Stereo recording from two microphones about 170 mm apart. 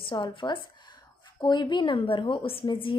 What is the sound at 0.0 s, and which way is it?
A woman's voice, 30° left (ahead or behind).